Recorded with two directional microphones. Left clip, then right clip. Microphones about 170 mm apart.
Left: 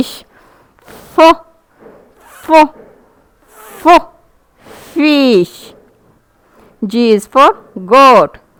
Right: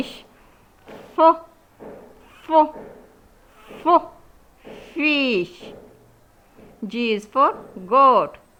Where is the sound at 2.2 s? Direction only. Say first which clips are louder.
Left 10 dB; 55° left (ahead or behind).